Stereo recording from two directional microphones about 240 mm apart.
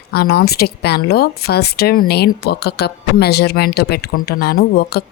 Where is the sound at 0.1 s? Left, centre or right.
Left.